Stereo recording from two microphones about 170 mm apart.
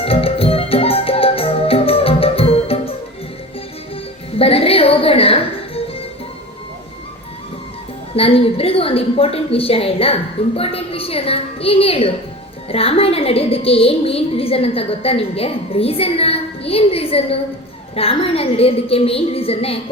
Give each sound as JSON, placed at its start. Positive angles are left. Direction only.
{"t": 0.0, "sound": "music", "side_deg": 35}
{"t": 4.4, "sound": "music", "side_deg": 35}
{"t": 8.1, "sound": "a woman's voice", "side_deg": 35}